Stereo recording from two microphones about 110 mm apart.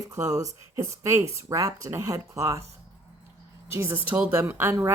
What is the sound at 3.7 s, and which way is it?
Speech, 25° right (ahead or behind).